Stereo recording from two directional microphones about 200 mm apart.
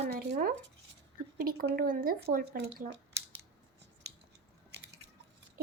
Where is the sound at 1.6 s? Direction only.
50° right (ahead or behind).